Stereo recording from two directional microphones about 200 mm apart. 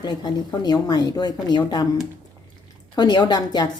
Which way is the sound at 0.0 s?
20° left (ahead or behind).